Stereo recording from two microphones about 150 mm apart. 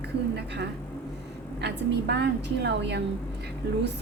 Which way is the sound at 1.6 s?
90° right.